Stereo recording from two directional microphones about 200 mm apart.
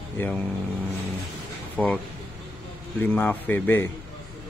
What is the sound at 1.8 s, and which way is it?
Speech, 5° left (ahead or behind).